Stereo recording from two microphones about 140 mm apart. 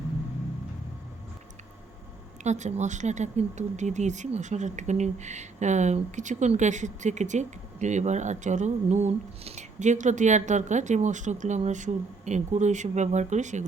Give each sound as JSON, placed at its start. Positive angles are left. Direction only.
{"t": 2.4, "sound": "speech", "side_deg": -55}